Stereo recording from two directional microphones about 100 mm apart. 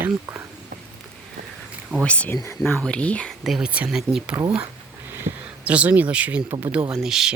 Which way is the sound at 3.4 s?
5° right (ahead or behind).